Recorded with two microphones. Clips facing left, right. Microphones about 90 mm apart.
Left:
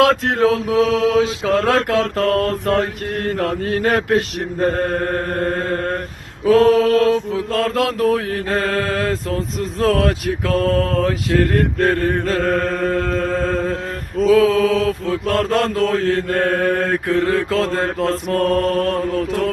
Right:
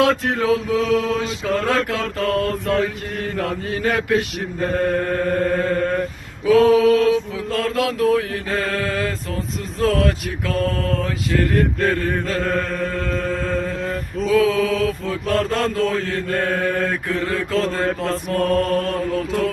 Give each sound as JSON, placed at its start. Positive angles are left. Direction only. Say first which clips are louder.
{"t": 0.0, "sound": "mantra", "louder": "left 4 dB", "side_deg": 70}
{"t": 10.6, "sound": "mantra", "louder": "left 3 dB", "side_deg": 45}
{"t": 11.0, "sound": "mantra", "louder": "left 4 dB", "side_deg": 60}
{"t": 14.3, "sound": "mantra", "louder": "left 4 dB", "side_deg": 65}
{"t": 17.8, "sound": "mantra", "louder": "left 2 dB", "side_deg": 50}